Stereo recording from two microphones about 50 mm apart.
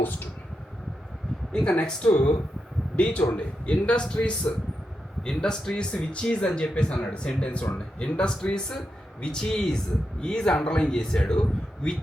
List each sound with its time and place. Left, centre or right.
1.7 s a man's voice: left